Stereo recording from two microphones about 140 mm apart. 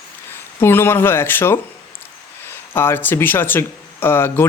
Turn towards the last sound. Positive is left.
turn(degrees=15)  # may be behind; listen again after turning